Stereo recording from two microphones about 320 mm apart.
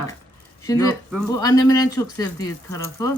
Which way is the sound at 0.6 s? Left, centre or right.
Centre.